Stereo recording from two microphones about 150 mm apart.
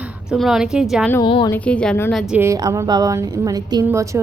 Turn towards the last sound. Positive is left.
turn(degrees=-20)  # may be behind; listen again after turning